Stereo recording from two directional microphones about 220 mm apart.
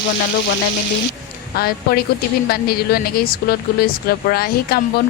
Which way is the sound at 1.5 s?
45° left (ahead or behind).